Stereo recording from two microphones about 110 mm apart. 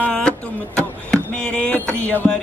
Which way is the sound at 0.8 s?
10° left (ahead or behind).